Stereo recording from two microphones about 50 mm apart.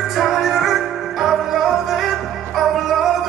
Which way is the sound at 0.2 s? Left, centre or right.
Centre.